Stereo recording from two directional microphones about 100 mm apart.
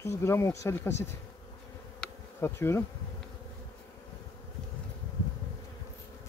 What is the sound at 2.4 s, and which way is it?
Speech, 25° left (ahead or behind).